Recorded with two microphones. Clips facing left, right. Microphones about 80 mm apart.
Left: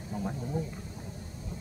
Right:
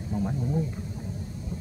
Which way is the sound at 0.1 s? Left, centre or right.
Centre.